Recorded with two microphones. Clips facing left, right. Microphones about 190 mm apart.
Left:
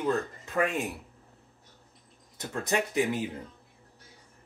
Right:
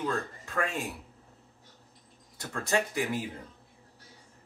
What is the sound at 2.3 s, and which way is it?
Speech, 20° left (ahead or behind).